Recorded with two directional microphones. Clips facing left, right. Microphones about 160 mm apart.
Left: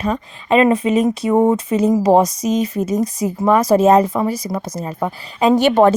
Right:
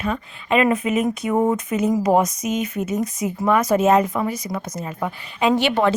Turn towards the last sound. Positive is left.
turn(degrees=45)  # may be behind; listen again after turning